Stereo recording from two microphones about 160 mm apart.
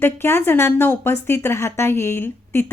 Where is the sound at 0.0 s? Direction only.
15° left (ahead or behind).